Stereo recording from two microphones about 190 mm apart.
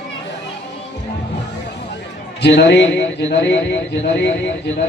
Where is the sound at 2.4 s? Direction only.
65° left (ahead or behind).